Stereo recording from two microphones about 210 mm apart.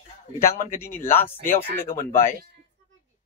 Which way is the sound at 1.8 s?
40° left (ahead or behind).